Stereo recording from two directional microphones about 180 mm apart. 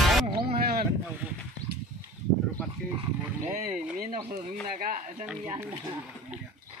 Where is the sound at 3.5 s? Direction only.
45° right (ahead or behind).